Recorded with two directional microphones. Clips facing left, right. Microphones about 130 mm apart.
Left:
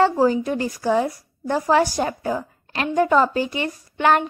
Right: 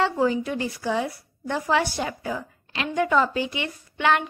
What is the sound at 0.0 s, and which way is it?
A woman's voice, 40° left (ahead or behind).